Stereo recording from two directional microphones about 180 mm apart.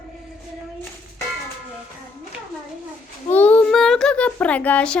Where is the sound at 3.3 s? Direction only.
10° left (ahead or behind).